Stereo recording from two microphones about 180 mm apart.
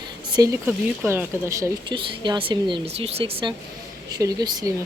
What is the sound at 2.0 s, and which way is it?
A woman's voice, 25° right (ahead or behind).